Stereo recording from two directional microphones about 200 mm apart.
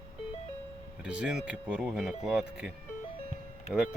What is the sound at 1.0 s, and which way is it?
Speech, 5° right (ahead or behind).